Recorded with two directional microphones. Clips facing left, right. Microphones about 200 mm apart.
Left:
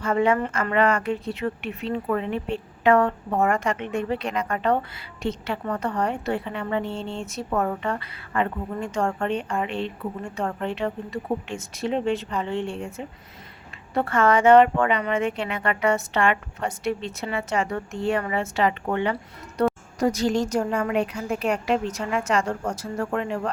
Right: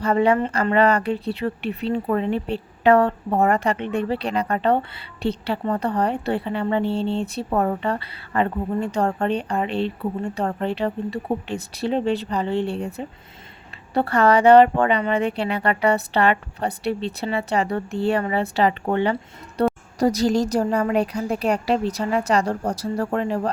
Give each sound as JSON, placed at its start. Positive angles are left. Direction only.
{"t": 0.0, "sound": "speech", "side_deg": -35}